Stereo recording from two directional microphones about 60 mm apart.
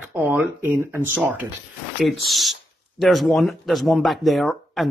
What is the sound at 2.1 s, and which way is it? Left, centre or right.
Speech, centre.